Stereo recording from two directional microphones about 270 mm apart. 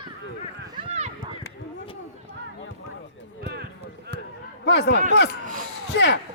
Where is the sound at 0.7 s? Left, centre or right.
Centre.